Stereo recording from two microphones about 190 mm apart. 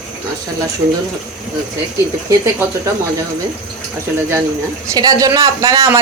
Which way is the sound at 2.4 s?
15° right (ahead or behind).